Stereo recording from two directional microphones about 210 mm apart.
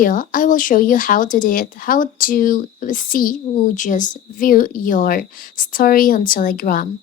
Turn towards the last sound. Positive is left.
turn(degrees=40)  # may be behind; listen again after turning